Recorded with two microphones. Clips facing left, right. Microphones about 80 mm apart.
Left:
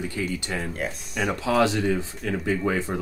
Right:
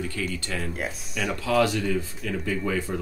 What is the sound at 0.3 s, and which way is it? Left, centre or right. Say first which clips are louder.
Speech: left 2 dB; centre.